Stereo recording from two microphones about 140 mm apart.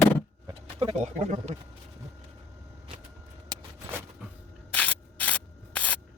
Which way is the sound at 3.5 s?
30° right (ahead or behind).